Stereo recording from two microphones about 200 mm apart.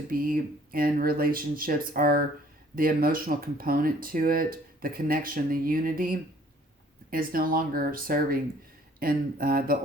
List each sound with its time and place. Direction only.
0.1 s speech: 45° right (ahead or behind)